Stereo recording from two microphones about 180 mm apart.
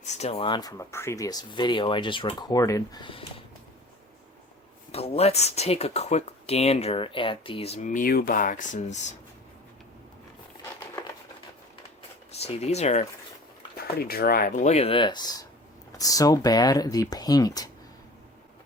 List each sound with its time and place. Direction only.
0.0 s speech: 40° left (ahead or behind)
4.9 s speech: 35° left (ahead or behind)
12.3 s speech: 35° left (ahead or behind)
14.0 s speech: 55° left (ahead or behind); by 17.7 s 20° left (ahead or behind)